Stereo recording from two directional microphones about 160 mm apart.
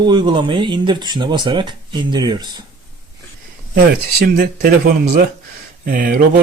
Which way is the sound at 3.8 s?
70° right (ahead or behind).